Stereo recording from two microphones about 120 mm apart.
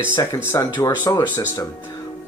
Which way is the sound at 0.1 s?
25° left (ahead or behind).